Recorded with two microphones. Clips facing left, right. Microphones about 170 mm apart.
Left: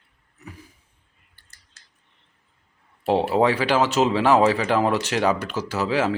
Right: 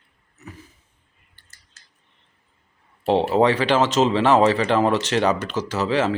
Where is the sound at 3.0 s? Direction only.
10° left (ahead or behind).